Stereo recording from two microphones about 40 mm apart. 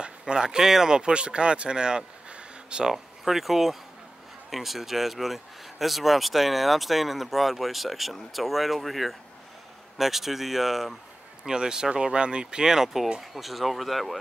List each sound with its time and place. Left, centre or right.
0.0 s speech: right
2.9 s speech: centre
11.4 s speech: centre